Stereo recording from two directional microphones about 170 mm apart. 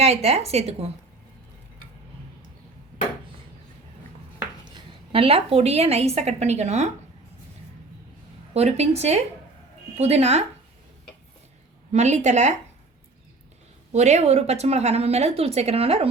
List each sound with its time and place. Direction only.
0.0 s a woman's voice: 35° right (ahead or behind)
4.6 s a woman's voice: 30° right (ahead or behind)
8.5 s a woman's voice: 40° right (ahead or behind)
11.9 s a woman's voice: 40° right (ahead or behind)
13.9 s a woman's voice: 40° right (ahead or behind)